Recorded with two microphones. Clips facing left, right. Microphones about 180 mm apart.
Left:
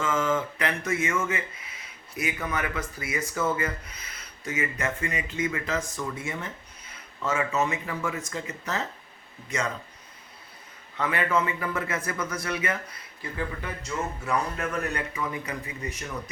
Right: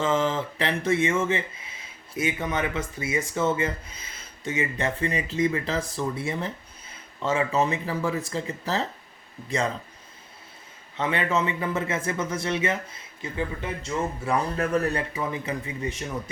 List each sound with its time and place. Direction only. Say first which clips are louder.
0.0 s speech: right 2 dB; 30° right (ahead or behind)
10.9 s speech: right 1 dB; 25° right (ahead or behind)